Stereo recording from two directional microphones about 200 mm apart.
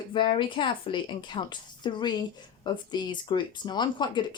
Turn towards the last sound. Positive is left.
turn(degrees=20)  # may be behind; listen again after turning